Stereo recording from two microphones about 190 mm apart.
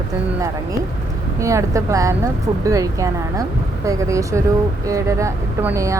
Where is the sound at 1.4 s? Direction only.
15° right (ahead or behind).